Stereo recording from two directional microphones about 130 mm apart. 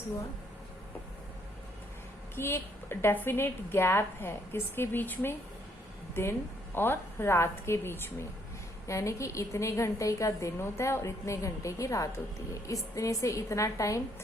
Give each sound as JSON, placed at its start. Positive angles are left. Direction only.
{"t": 2.3, "sound": "a woman's voice", "side_deg": 15}